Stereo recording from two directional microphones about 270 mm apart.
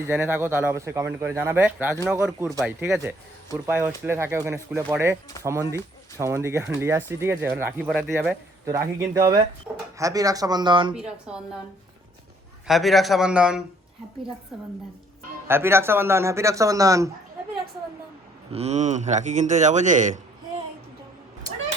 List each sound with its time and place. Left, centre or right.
0.1 s a man's voice: centre
10.9 s a man's voice: centre
12.6 s a man's voice: centre
18.5 s a man's voice: right